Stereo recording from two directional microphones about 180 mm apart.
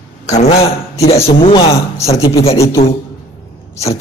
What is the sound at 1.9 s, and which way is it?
Speech, 15° left (ahead or behind).